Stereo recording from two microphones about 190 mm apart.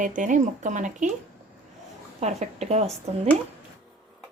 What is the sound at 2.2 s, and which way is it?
Speech, 35° right (ahead or behind).